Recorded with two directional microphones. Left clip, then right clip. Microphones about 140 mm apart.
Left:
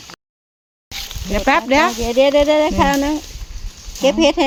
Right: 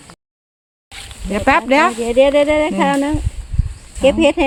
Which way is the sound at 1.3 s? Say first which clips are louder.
Right 1 dB; 25° right (ahead or behind).